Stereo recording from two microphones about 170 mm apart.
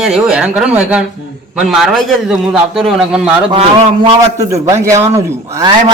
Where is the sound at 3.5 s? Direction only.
30° right (ahead or behind).